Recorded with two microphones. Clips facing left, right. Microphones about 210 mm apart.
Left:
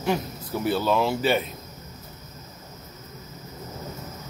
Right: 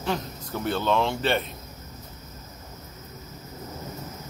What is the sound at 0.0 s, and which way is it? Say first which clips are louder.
Speech: left 3 dB; 10° left (ahead or behind).